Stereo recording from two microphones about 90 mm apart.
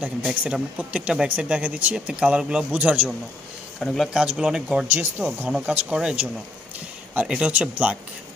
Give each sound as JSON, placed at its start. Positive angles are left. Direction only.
{"t": 0.0, "sound": "speech", "side_deg": -20}
{"t": 3.8, "sound": "speech", "side_deg": 5}
{"t": 4.1, "sound": "speech", "side_deg": -10}
{"t": 4.9, "sound": "speech", "side_deg": -20}
{"t": 5.5, "sound": "speech", "side_deg": -10}